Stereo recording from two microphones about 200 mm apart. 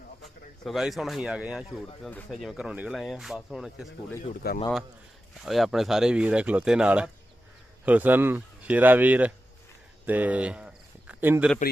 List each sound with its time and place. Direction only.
0.2 s speech: centre (ahead or behind)
4.4 s speech: 50° left (ahead or behind)
5.4 s speech: centre (ahead or behind)
10.1 s a sound: 10° right (ahead or behind)